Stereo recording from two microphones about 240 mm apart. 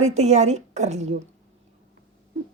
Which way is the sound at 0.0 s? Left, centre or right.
Right.